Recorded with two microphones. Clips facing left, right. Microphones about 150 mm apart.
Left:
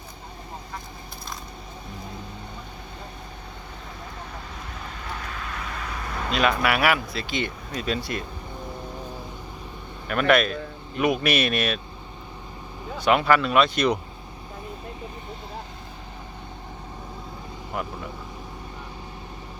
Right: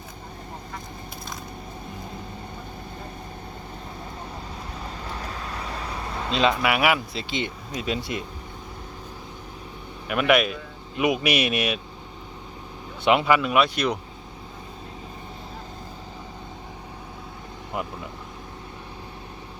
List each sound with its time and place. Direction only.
5.0 s vehicle: 30° right (ahead or behind)
10.1 s speech: 10° right (ahead or behind)
13.0 s speech: 15° right (ahead or behind)
17.7 s vehicle: 20° right (ahead or behind)